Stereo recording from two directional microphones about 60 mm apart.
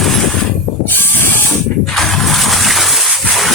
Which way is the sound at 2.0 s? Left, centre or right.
Centre.